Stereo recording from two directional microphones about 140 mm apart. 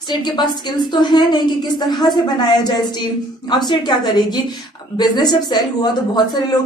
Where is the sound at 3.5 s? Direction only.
30° left (ahead or behind).